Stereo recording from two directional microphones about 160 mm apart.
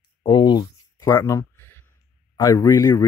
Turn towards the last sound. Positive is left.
turn(degrees=20)  # may be behind; listen again after turning